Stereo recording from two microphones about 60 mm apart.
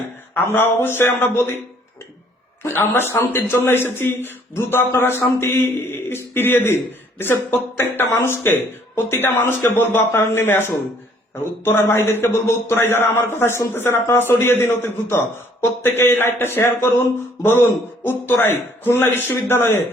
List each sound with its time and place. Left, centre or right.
0.3 s speech: left
2.6 s speech: left
7.8 s a man's voice: left